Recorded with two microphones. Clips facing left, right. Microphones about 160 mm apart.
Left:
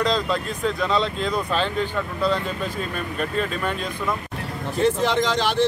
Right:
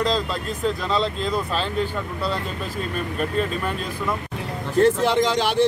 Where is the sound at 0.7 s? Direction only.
Centre (ahead or behind).